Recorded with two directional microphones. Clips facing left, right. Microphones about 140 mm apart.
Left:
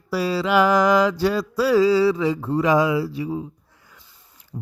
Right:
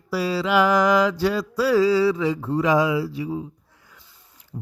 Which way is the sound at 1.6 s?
25° left (ahead or behind).